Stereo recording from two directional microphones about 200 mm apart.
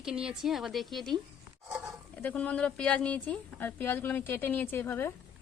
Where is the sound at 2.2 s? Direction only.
5° left (ahead or behind).